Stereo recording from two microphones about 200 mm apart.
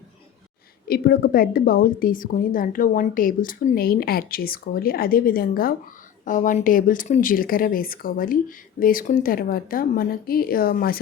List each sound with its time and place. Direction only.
0.9 s a woman's voice: 50° left (ahead or behind)